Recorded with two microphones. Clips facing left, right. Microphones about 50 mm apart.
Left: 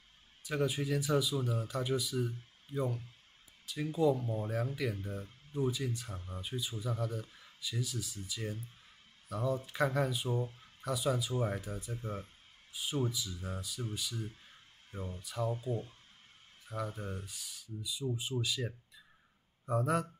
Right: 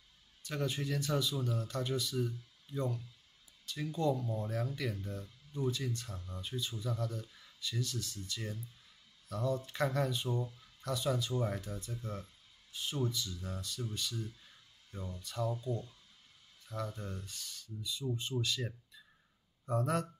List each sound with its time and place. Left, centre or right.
0.4 s speech: centre
10.4 s speech: left
10.8 s speech: centre
11.9 s speech: left
12.7 s speech: centre
16.6 s speech: centre